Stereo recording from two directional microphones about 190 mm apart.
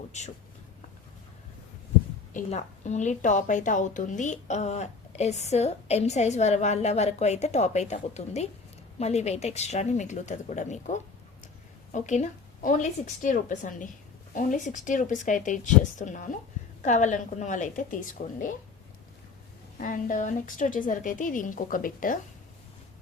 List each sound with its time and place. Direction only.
2.3 s a woman's voice: 35° left (ahead or behind)
19.8 s a woman's voice: 45° left (ahead or behind)